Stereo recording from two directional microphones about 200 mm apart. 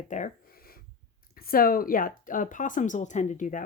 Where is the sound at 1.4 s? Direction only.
45° left (ahead or behind).